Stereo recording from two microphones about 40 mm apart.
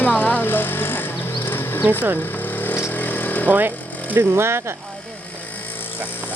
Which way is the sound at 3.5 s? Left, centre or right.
Right.